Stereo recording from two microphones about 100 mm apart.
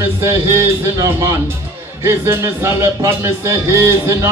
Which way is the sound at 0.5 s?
30° right (ahead or behind).